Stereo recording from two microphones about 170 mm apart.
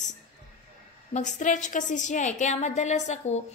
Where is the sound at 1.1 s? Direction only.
45° left (ahead or behind).